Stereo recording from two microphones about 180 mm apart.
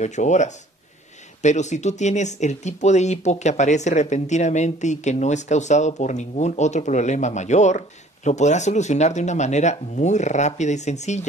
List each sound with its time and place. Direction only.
0.0 s speech: 40° left (ahead or behind)